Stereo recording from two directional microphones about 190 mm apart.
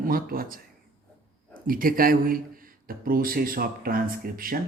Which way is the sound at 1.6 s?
50° right (ahead or behind).